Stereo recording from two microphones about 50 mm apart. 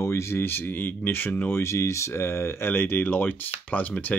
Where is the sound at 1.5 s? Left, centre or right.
Left.